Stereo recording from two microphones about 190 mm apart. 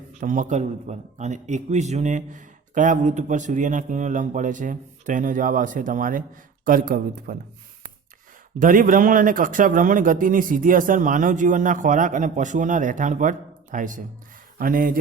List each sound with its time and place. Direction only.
0.2 s a man's voice: 40° right (ahead or behind)
8.5 s a man's voice: 45° right (ahead or behind)